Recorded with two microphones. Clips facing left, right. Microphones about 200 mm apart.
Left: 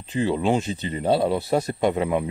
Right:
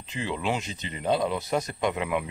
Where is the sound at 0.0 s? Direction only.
35° left (ahead or behind).